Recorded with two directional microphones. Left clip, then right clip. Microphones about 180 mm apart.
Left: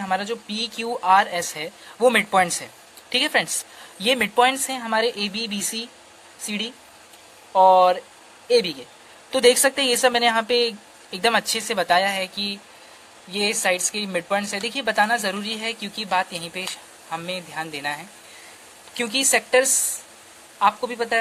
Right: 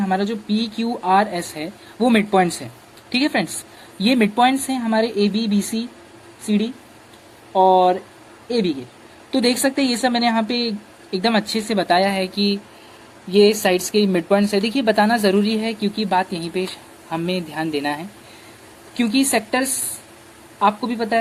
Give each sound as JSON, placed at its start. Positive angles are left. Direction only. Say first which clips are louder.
{"t": 0.0, "sound": "speech", "louder": "right 3 dB", "side_deg": 55}
{"t": 7.5, "sound": "speech", "louder": "even", "side_deg": 60}
{"t": 17.1, "sound": "speech", "louder": "right 5 dB", "side_deg": 30}
{"t": 18.9, "sound": "speech", "louder": "right 2 dB", "side_deg": 45}